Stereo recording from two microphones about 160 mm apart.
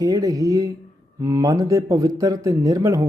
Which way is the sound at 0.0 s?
20° right (ahead or behind).